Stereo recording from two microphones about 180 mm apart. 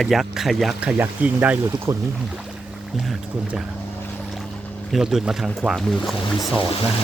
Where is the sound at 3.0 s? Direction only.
5° right (ahead or behind).